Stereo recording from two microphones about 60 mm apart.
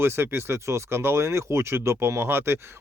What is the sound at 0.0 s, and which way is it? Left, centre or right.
Speech, right.